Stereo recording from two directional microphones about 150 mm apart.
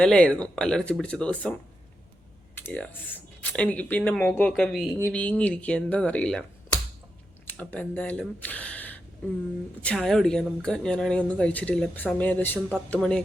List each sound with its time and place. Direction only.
0.0 s speech: 10° left (ahead or behind)
2.6 s speech: 10° left (ahead or behind)
4.9 s speech: 10° left (ahead or behind)
7.4 s speech: 10° left (ahead or behind)